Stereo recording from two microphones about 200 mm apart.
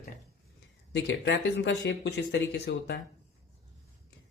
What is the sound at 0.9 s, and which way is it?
Speech, 60° left (ahead or behind).